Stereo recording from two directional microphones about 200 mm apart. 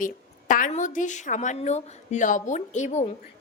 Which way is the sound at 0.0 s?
40° left (ahead or behind).